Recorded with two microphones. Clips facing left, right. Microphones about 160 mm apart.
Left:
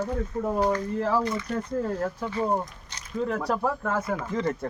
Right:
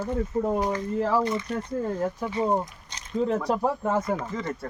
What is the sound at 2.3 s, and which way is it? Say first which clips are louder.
Speech: right 2 dB; 15° right (ahead or behind).